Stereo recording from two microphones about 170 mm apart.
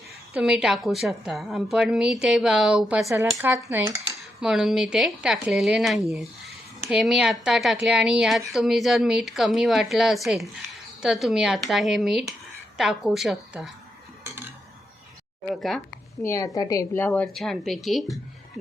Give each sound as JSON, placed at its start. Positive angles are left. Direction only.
{"t": 0.3, "sound": "speech", "side_deg": -5}
{"t": 3.4, "sound": "cutlery", "side_deg": -15}
{"t": 4.4, "sound": "speech", "side_deg": -5}
{"t": 16.2, "sound": "a woman's voice", "side_deg": 20}